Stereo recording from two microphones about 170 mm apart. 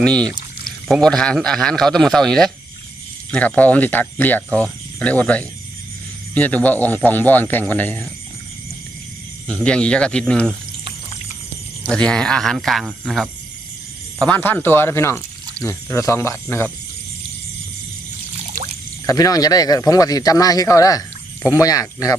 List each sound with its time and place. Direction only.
0.0 s a man's voice: 5° left (ahead or behind)
9.5 s a man's voice: 5° left (ahead or behind)
11.8 s a man's voice: 5° left (ahead or behind)
19.0 s speech: 20° left (ahead or behind)